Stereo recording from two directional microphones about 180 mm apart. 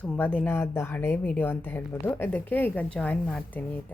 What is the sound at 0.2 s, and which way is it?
Speech, 10° left (ahead or behind).